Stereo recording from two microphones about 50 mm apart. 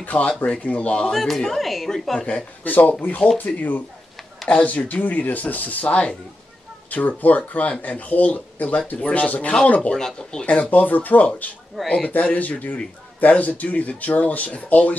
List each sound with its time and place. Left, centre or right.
0.0 s speech: left
1.1 s speech: centre
2.6 s a man's voice: left
9.9 s speech: centre
10.4 s a man's voice: left
11.8 s speech: centre
12.1 s a man's voice: left